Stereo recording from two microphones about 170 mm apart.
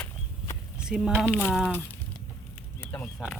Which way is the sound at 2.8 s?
10° left (ahead or behind).